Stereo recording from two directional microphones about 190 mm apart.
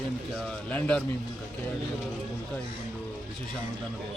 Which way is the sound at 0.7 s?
5° left (ahead or behind).